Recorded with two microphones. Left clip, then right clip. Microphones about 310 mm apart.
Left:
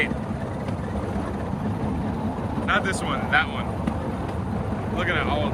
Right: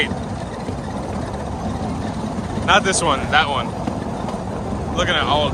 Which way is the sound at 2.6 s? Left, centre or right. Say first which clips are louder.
Right 9 dB; centre.